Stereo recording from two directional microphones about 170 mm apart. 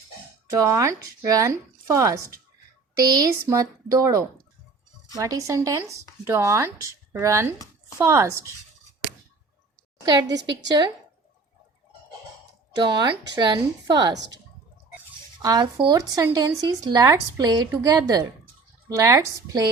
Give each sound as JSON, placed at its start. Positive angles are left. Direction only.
{"t": 0.5, "sound": "speech", "side_deg": -20}
{"t": 10.5, "sound": "speech", "side_deg": -25}
{"t": 12.7, "sound": "speech", "side_deg": -25}
{"t": 14.1, "sound": "speech", "side_deg": -90}
{"t": 15.4, "sound": "speech", "side_deg": -25}